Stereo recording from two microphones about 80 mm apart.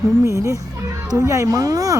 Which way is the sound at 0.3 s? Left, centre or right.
Right.